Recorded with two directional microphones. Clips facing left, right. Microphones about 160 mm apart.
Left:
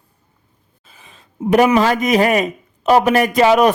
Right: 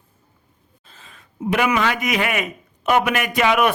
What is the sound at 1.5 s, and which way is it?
A man's voice, 35° left (ahead or behind).